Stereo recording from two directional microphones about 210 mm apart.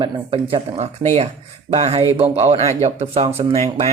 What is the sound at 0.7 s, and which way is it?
Speech, 30° right (ahead or behind).